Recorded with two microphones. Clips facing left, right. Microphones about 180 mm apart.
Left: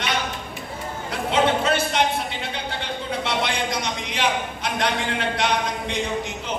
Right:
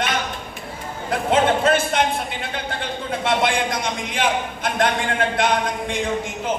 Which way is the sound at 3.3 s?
50° right (ahead or behind).